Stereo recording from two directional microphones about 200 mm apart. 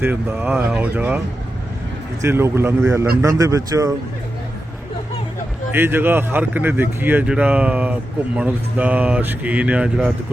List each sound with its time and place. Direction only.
0.0 s speech: 10° right (ahead or behind)
2.2 s speech: 10° right (ahead or behind)
5.7 s speech: 10° right (ahead or behind)